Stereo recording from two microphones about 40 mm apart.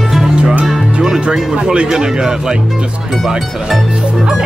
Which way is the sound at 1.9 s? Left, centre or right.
Centre.